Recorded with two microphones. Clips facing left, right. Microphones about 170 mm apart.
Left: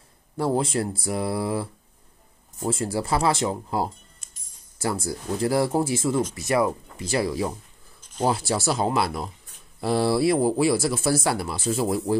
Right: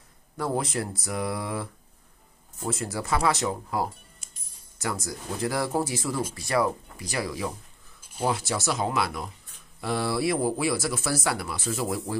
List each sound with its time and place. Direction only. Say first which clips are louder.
0.4 s speech: left 5 dB; 30° left (ahead or behind)